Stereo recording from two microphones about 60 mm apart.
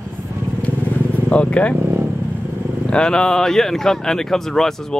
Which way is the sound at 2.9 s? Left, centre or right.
Centre.